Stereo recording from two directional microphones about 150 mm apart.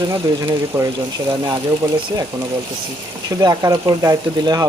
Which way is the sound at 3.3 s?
25° right (ahead or behind).